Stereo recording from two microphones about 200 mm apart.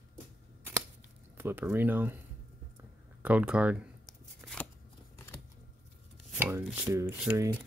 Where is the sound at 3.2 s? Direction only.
5° right (ahead or behind).